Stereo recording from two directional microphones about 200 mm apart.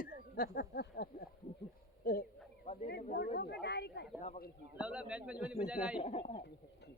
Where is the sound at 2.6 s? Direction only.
35° left (ahead or behind).